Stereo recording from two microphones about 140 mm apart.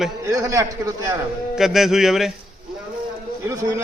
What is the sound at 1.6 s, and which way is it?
Speech, 5° right (ahead or behind).